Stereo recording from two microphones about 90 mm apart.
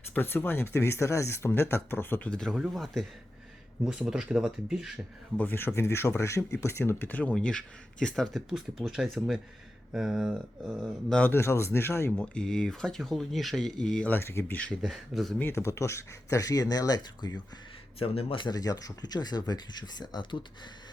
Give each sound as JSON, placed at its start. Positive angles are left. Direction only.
{"t": 0.1, "sound": "speech", "side_deg": 20}
{"t": 2.3, "sound": "speech", "side_deg": 5}
{"t": 5.4, "sound": "speech", "side_deg": 25}
{"t": 7.1, "sound": "speech", "side_deg": 15}
{"t": 11.2, "sound": "speech", "side_deg": 25}
{"t": 12.1, "sound": "speech", "side_deg": 10}
{"t": 14.1, "sound": "speech", "side_deg": 30}
{"t": 14.8, "sound": "speech", "side_deg": 0}
{"t": 15.4, "sound": "speech", "side_deg": 25}
{"t": 18.0, "sound": "speech", "side_deg": 90}
{"t": 18.4, "sound": "speech", "side_deg": 45}